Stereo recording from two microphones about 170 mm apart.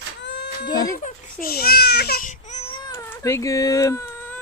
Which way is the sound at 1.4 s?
60° left (ahead or behind).